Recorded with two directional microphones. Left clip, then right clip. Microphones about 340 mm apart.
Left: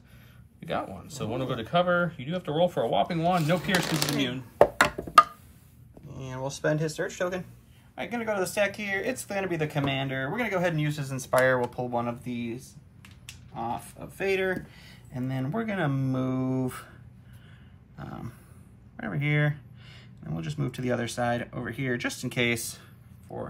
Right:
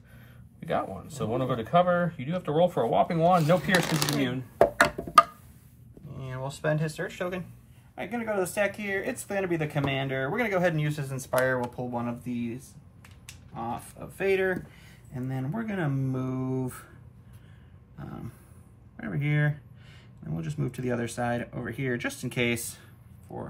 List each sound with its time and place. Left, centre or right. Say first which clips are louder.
0.6 s speech: right 2 dB; centre
17.9 s a sound: left 2 dB; centre
18.9 s speech: left 2 dB; centre